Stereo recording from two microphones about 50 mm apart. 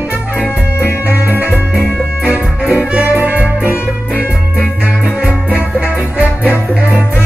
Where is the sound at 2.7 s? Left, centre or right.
Right.